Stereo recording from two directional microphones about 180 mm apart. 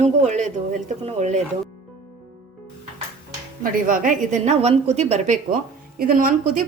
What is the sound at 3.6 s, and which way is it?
A woman's voice, 50° right (ahead or behind).